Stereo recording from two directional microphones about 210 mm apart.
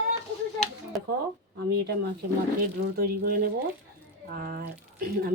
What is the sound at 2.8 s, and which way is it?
Speech, 45° right (ahead or behind).